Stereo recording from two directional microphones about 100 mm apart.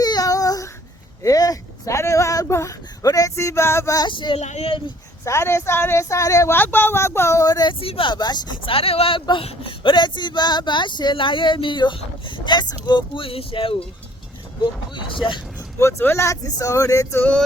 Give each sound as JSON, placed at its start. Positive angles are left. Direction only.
{"t": 0.0, "sound": "child singing", "side_deg": 40}
{"t": 1.2, "sound": "a sound", "side_deg": 35}
{"t": 4.1, "sound": "speech", "side_deg": 55}
{"t": 4.4, "sound": "speech", "side_deg": 85}
{"t": 5.2, "sound": "speech", "side_deg": 25}
{"t": 6.6, "sound": "speech", "side_deg": 20}
{"t": 7.7, "sound": "speech", "side_deg": 65}
{"t": 8.6, "sound": "speech", "side_deg": 70}
{"t": 15.8, "sound": "speech", "side_deg": 25}